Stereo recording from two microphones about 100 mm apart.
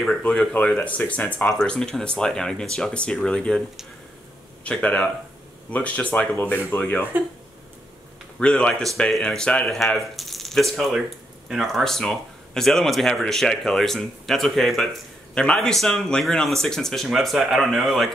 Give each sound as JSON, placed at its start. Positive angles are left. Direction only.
{"t": 0.0, "sound": "speech", "side_deg": 10}
{"t": 4.6, "sound": "speech", "side_deg": 15}
{"t": 8.4, "sound": "speech", "side_deg": 10}